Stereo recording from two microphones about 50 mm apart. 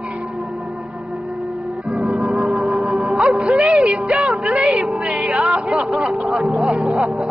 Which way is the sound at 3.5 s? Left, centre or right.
Centre.